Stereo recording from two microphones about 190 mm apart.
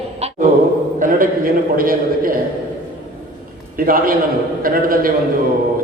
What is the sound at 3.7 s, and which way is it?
A man's voice, 50° right (ahead or behind).